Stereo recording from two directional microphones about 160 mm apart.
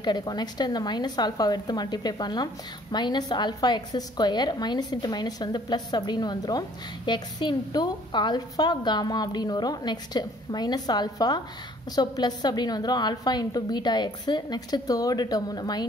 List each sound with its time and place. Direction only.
0.0 s a woman's voice: 25° left (ahead or behind)